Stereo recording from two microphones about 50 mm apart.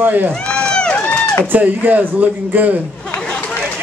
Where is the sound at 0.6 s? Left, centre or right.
Centre.